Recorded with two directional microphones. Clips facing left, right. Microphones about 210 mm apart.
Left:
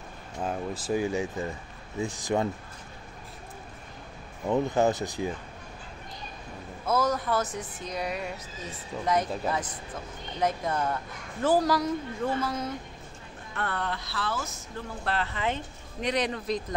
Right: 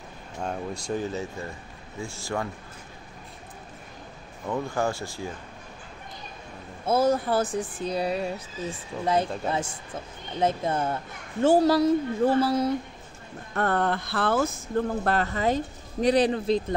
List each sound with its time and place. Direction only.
0.4 s speech: 5° left (ahead or behind); by 2.5 s 20° left (ahead or behind)
4.5 s speech: 20° left (ahead or behind)
6.9 s a woman's voice: 30° right (ahead or behind)
13.6 s speech: 45° right (ahead or behind); by 16.7 s 30° right (ahead or behind)